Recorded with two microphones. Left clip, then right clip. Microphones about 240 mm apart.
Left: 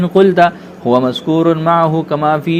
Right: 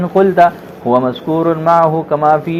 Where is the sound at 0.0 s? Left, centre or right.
Left.